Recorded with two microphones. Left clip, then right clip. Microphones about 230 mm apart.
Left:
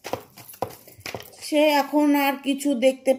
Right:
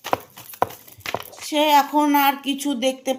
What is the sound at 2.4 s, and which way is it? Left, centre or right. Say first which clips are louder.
Speech: even; centre.